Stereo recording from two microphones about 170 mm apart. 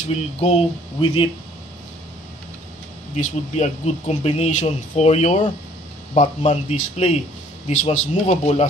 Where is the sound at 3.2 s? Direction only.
45° left (ahead or behind).